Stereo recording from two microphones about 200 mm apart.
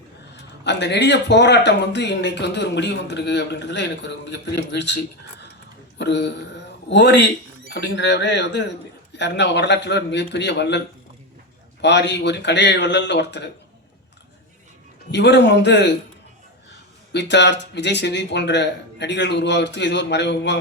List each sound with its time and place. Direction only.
0.6 s a man's voice: 60° left (ahead or behind)
6.0 s a man's voice: 60° left (ahead or behind)
15.1 s a man's voice: 60° left (ahead or behind)
17.1 s a man's voice: 60° left (ahead or behind)